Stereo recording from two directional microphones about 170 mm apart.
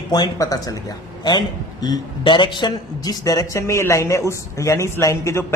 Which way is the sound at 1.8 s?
25° left (ahead or behind).